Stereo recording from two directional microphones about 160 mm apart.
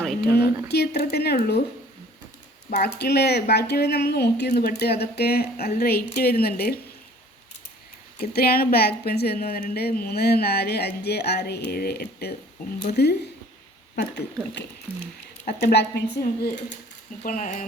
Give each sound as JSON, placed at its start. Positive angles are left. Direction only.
{"t": 0.0, "sound": "a sound", "side_deg": 0}
{"t": 0.3, "sound": "a woman's voice", "side_deg": 90}
{"t": 2.8, "sound": "a woman's voice", "side_deg": 90}
{"t": 8.2, "sound": "speech", "side_deg": 75}
{"t": 11.7, "sound": "a woman's voice", "side_deg": 75}
{"t": 15.4, "sound": "speech", "side_deg": 85}
{"t": 17.2, "sound": "speech", "side_deg": 55}